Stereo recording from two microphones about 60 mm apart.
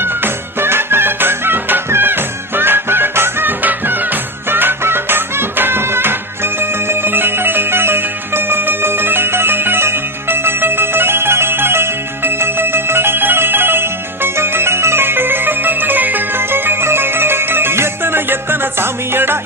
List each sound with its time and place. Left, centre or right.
0.0 s music: right